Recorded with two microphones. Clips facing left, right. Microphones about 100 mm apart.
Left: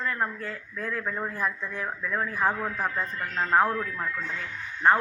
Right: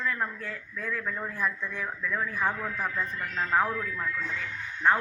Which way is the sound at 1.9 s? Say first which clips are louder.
Left 1 dB; 25° left (ahead or behind).